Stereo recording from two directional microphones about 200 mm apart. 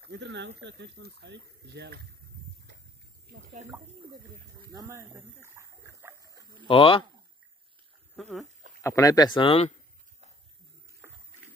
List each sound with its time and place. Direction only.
0.0 s speech: 60° right (ahead or behind)
4.6 s speech: 15° right (ahead or behind)
6.7 s speech: 25° left (ahead or behind)
8.2 s speech: centre (ahead or behind)
8.8 s speech: 15° left (ahead or behind)